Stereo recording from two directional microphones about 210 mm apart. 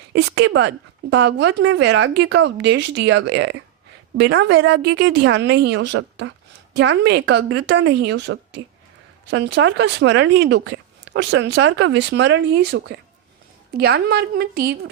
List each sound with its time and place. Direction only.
0.1 s a woman's voice: 55° right (ahead or behind)